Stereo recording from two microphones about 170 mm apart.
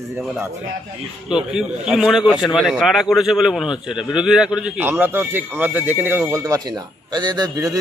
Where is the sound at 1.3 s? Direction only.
5° right (ahead or behind).